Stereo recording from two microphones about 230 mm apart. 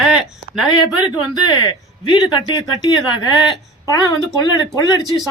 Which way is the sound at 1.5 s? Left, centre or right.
Centre.